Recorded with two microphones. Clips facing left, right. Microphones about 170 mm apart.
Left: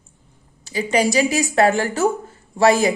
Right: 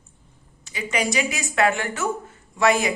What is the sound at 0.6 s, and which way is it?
A woman's voice, 35° left (ahead or behind).